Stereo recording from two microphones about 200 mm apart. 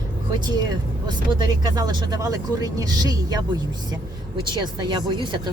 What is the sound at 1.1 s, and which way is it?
Speech, 20° right (ahead or behind).